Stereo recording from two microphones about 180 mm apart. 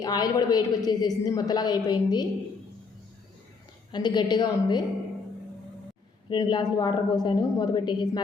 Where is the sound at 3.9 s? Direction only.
25° left (ahead or behind).